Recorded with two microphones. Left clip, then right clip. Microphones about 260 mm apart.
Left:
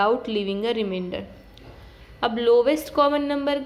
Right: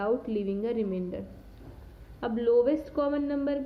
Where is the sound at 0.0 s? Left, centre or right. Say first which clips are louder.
Left 7 dB; centre.